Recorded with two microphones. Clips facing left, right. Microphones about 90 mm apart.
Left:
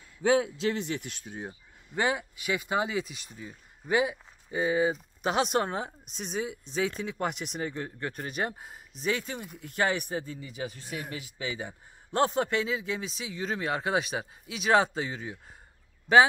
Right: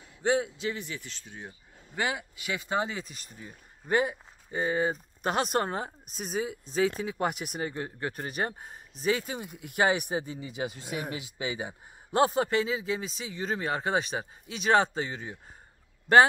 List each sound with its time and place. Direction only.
0.6 s speech: 80° left; by 1.1 s 65° left (ahead or behind)
2.0 s speech: 20° left (ahead or behind); by 16.2 s centre (ahead or behind)